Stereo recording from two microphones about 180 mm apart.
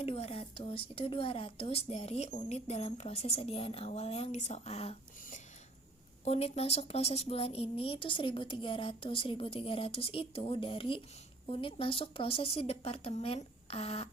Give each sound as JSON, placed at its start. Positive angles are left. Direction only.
{"t": 0.0, "sound": "a woman's voice", "side_deg": 35}